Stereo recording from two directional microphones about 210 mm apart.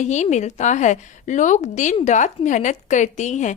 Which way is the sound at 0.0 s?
35° left (ahead or behind).